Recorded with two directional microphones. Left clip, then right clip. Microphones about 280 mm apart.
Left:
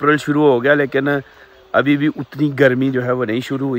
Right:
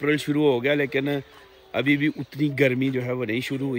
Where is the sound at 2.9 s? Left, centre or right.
Left.